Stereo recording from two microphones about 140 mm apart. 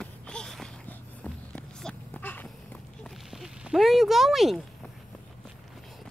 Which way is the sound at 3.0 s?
Centre (ahead or behind).